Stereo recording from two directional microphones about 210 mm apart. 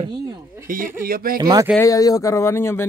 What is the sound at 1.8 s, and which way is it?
Speech, 15° left (ahead or behind).